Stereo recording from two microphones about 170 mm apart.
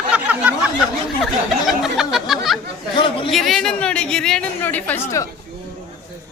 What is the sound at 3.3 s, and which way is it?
A woman's voice, centre (ahead or behind).